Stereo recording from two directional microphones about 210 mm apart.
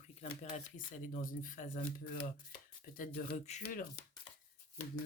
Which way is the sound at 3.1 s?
35° left (ahead or behind).